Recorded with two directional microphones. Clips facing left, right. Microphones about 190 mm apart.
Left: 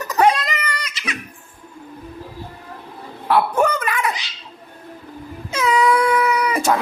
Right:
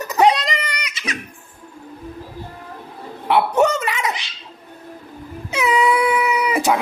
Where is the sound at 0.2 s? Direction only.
20° right (ahead or behind).